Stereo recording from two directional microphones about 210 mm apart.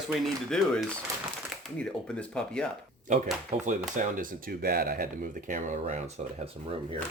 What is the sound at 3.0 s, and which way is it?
Speech, 35° right (ahead or behind).